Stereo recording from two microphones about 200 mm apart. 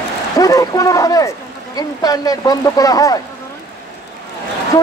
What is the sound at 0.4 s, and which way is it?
Speech, 15° left (ahead or behind).